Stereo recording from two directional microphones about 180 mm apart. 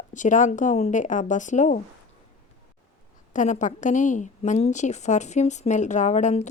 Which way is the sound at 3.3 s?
45° left (ahead or behind).